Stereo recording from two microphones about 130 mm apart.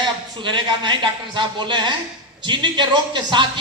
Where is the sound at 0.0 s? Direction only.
35° right (ahead or behind).